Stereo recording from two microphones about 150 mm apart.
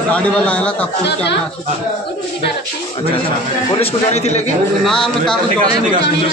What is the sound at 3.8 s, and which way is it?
Speech, 45° left (ahead or behind).